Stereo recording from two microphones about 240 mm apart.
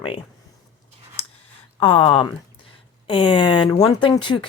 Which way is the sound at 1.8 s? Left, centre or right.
Left.